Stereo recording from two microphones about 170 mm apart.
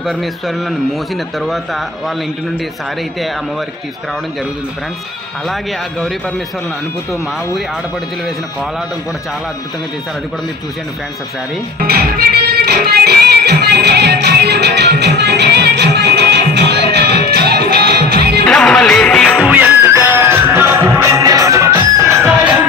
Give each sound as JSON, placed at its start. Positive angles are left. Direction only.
{"t": 0.0, "sound": "speech", "side_deg": 0}
{"t": 5.5, "sound": "speech", "side_deg": 0}
{"t": 11.8, "sound": "music", "side_deg": -65}
{"t": 18.5, "sound": "music", "side_deg": 5}